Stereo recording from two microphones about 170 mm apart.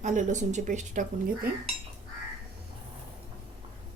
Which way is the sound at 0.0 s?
45° right (ahead or behind).